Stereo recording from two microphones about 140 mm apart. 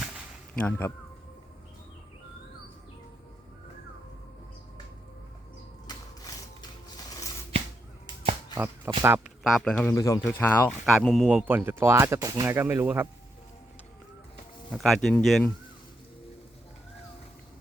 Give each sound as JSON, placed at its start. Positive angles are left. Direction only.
{"t": 0.6, "sound": "speech", "side_deg": 15}
{"t": 5.9, "sound": "a sound", "side_deg": 30}
{"t": 8.5, "sound": "speech", "side_deg": -15}
{"t": 9.4, "sound": "speech", "side_deg": 0}
{"t": 9.9, "sound": "speech", "side_deg": 25}
{"t": 10.2, "sound": "speech", "side_deg": 15}
{"t": 10.7, "sound": "speech", "side_deg": 0}
{"t": 11.3, "sound": "speech", "side_deg": -10}
{"t": 14.7, "sound": "speech", "side_deg": 0}